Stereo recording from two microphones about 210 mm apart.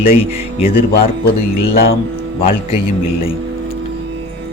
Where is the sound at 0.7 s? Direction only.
45° left (ahead or behind).